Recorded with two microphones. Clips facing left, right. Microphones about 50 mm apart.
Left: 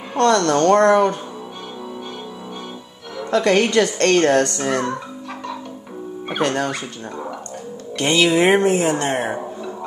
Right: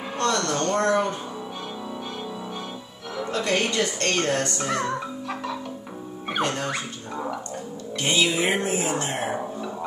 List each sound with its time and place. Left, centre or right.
0.3 s speech: left
3.3 s a woman's voice: left
3.7 s a woman's voice: left
6.4 s speech: left
8.0 s speech: left